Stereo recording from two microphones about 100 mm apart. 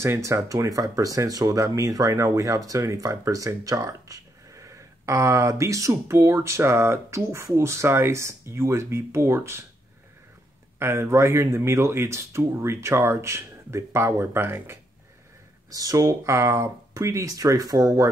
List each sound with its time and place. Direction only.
0.0 s speech: 30° right (ahead or behind)
10.8 s speech: 25° right (ahead or behind)
15.7 s speech: 35° right (ahead or behind)